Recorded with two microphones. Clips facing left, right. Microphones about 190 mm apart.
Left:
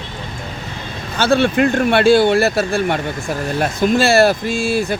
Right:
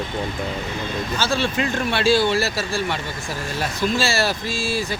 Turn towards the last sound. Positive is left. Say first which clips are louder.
# left 7 dB
turn(degrees=55)  # may be behind; listen again after turning